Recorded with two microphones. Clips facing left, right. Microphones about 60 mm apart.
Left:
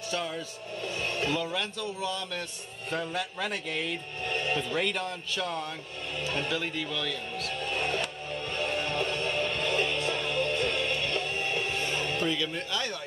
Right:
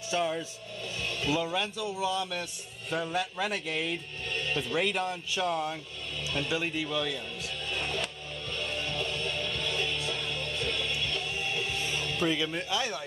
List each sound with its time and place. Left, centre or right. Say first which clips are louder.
0.1 s speech: right 4 dB; centre
1.0 s a sound: left 2 dB; left
1.3 s speech: right 1 dB; centre
4.3 s music: left 3 dB; left
4.7 s speech: right 1 dB; centre
6.2 s speech: left 1 dB; left
6.5 s speech: right 1 dB; centre
7.7 s music: left 2 dB; left
12.3 s speech: right 1 dB; centre